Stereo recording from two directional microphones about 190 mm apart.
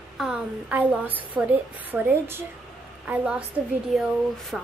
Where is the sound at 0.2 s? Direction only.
5° right (ahead or behind).